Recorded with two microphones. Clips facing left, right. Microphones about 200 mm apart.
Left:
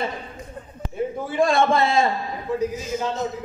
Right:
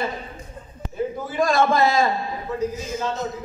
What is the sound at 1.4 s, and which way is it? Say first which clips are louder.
Speech: even; 30° left (ahead or behind).